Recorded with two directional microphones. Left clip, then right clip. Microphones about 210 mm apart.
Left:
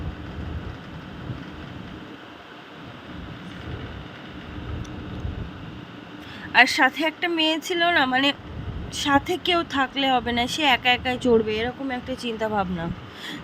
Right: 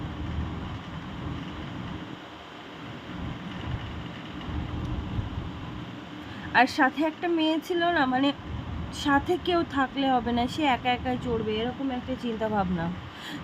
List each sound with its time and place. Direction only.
6.5 s speech: 35° left (ahead or behind)